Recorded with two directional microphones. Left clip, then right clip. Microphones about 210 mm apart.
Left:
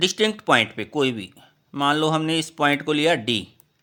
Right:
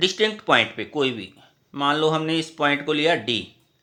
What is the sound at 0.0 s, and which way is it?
Speech, 35° left (ahead or behind).